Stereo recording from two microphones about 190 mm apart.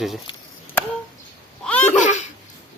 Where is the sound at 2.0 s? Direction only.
40° left (ahead or behind).